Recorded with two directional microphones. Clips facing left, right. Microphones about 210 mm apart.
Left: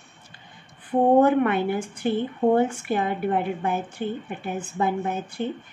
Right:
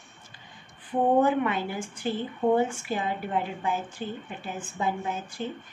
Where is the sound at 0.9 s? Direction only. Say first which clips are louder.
Left 5 dB; 60° left (ahead or behind).